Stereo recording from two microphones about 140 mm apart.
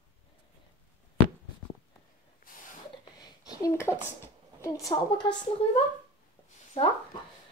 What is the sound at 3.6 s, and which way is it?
Speech, 20° left (ahead or behind).